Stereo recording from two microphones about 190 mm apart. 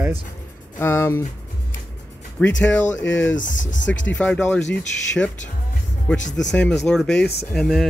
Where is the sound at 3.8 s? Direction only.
75° left (ahead or behind).